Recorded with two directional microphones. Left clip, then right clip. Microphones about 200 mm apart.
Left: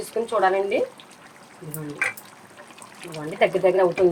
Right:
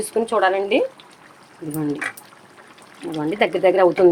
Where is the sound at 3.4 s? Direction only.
60° right (ahead or behind).